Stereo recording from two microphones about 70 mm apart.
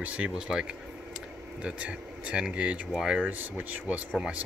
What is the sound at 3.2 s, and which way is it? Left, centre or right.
Speech, right.